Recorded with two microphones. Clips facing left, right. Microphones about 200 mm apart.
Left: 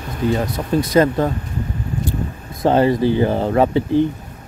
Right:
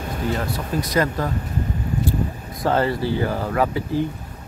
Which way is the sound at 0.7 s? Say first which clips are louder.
Left 7 dB; 25° left (ahead or behind).